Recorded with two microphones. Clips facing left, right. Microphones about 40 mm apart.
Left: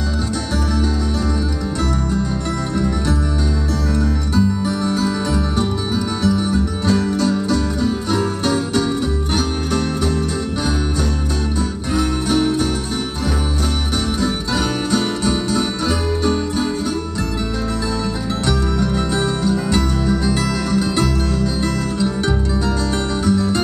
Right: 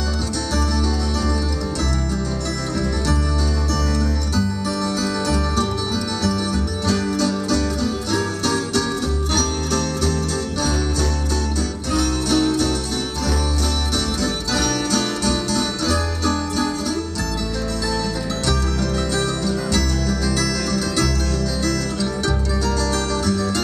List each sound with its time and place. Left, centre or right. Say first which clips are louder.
4.4 s music: left 5 dB; left
11.9 s music: left 1 dB; centre
14.2 s music: left 2 dB; centre
18.5 s music: left 4 dB; centre